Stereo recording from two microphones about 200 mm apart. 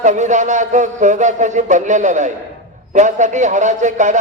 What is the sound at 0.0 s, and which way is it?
A man's voice, 35° right (ahead or behind).